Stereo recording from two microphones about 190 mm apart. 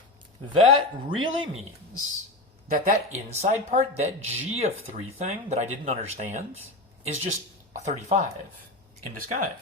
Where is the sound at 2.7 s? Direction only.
35° right (ahead or behind).